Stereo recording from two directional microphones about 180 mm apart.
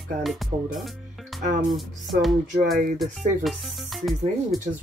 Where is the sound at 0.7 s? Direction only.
Centre (ahead or behind).